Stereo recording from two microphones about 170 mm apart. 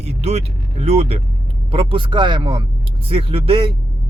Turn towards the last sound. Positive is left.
turn(degrees=-30)  # may be behind; listen again after turning